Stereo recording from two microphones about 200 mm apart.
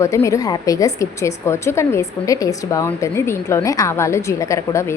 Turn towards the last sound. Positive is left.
turn(degrees=15)  # may be behind; listen again after turning